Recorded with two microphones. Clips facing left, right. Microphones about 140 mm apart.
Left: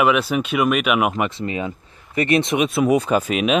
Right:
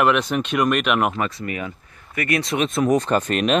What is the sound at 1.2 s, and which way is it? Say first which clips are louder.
Speech: left 3 dB; 25° left (ahead or behind).